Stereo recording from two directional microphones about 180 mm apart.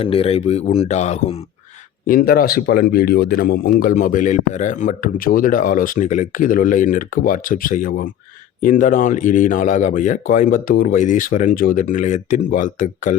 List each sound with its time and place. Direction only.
0.0 s speech: 30° left (ahead or behind)
2.0 s speech: 55° left (ahead or behind)